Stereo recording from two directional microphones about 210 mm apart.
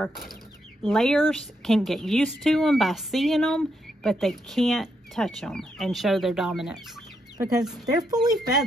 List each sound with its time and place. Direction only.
0.8 s a woman's voice: centre (ahead or behind)
7.3 s speech: 20° right (ahead or behind)
7.6 s a woman's voice: centre (ahead or behind)
7.9 s speech: 20° right (ahead or behind)